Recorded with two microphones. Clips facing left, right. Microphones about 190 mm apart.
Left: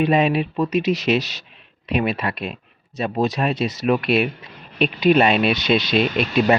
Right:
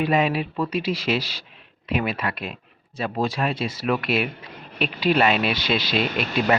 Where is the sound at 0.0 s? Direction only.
25° left (ahead or behind).